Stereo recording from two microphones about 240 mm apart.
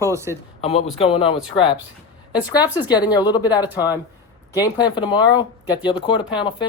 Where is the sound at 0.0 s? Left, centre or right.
Centre.